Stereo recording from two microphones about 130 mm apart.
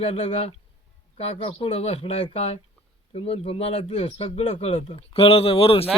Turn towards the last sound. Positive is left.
turn(degrees=50)  # may be behind; listen again after turning